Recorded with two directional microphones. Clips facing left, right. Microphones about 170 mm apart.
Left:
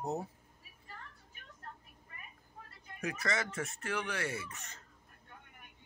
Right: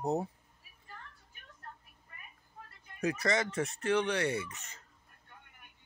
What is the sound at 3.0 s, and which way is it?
Speech, 35° right (ahead or behind).